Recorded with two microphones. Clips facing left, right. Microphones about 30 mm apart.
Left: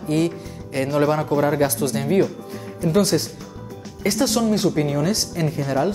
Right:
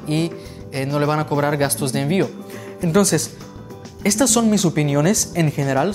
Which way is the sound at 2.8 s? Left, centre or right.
Right.